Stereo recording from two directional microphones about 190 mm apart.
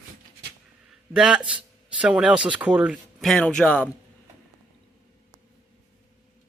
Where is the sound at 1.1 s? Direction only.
5° right (ahead or behind).